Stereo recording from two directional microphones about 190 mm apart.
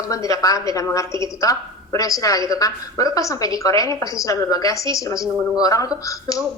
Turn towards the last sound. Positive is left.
turn(degrees=15)  # may be behind; listen again after turning